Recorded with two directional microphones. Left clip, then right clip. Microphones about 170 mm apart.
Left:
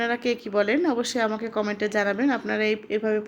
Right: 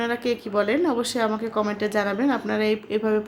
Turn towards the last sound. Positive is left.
turn(degrees=10)  # may be behind; listen again after turning